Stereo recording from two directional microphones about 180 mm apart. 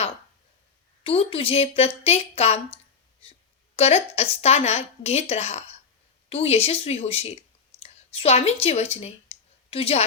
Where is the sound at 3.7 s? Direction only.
35° left (ahead or behind).